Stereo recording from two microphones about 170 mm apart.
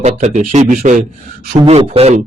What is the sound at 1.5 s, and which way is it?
Speech, 30° right (ahead or behind).